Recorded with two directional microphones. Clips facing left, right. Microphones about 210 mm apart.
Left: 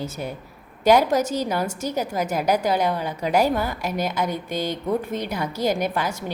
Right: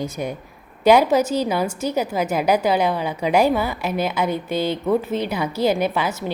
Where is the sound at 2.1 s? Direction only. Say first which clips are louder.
Right 2 dB; 10° right (ahead or behind).